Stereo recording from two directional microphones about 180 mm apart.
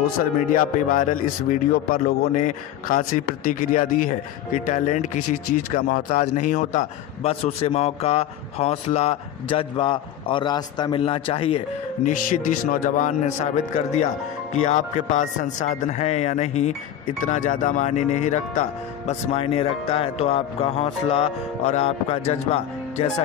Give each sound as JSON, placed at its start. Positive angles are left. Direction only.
{"t": 0.0, "sound": "a man's voice", "side_deg": 50}
{"t": 5.8, "sound": "a man's voice", "side_deg": 55}
{"t": 12.0, "sound": "a man's voice", "side_deg": 50}